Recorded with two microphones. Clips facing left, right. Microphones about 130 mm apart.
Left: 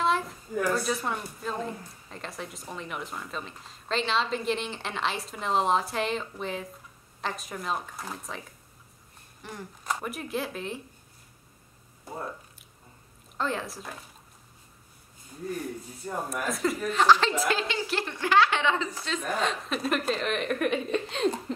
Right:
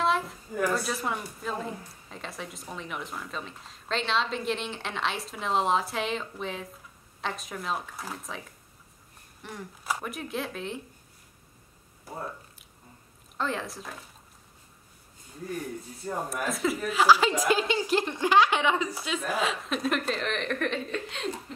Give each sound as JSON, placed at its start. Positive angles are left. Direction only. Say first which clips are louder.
{"t": 0.0, "sound": "a woman's voice", "louder": "even", "side_deg": 0}
{"t": 9.4, "sound": "speech", "louder": "even", "side_deg": 0}
{"t": 12.1, "sound": "speech", "louder": "left 1 dB", "side_deg": 25}
{"t": 13.4, "sound": "speech", "louder": "left 1 dB", "side_deg": 0}
{"t": 16.3, "sound": "a woman's voice", "louder": "left 1 dB", "side_deg": 0}